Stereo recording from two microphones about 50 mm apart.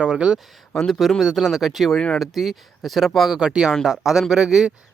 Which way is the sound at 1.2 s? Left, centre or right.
Centre.